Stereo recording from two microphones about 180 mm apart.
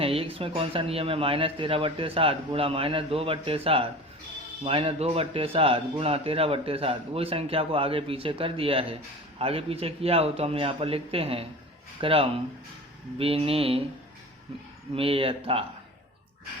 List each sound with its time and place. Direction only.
0.0 s a man's voice: 30° right (ahead or behind)
14.9 s a man's voice: 30° right (ahead or behind)